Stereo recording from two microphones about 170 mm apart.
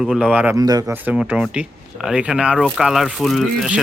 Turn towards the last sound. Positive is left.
turn(degrees=0)  # may be behind; listen again after turning